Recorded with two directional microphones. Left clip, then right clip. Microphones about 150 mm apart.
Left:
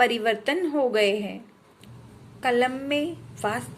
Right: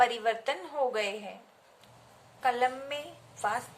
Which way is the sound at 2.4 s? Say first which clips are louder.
Left 5 dB; 30° left (ahead or behind).